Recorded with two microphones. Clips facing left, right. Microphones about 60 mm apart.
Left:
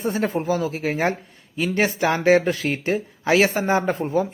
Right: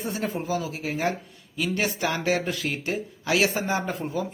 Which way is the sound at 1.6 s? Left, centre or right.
Left.